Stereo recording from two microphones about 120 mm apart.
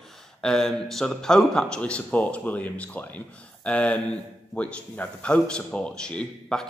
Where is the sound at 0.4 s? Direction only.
5° left (ahead or behind).